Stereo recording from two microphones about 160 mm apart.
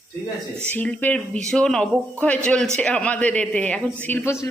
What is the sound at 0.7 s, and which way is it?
A woman's voice, 10° left (ahead or behind).